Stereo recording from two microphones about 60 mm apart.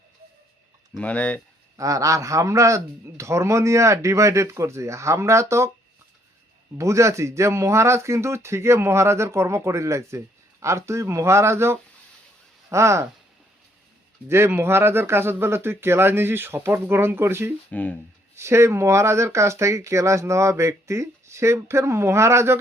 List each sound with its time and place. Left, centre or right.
0.9 s speech: left
1.7 s a man's voice: right
6.7 s speech: right
14.3 s speech: right
17.7 s speech: left
18.3 s speech: right